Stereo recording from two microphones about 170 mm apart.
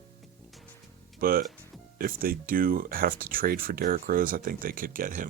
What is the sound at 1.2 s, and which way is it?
Speech, 60° right (ahead or behind).